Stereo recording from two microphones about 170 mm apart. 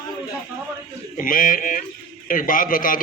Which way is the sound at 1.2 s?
55° left (ahead or behind).